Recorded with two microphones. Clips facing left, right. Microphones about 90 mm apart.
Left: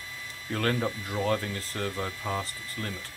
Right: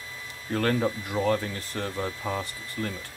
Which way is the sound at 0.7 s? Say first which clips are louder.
Right 3 dB; 20° right (ahead or behind).